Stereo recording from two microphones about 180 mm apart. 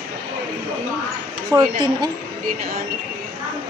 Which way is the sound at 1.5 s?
20° right (ahead or behind).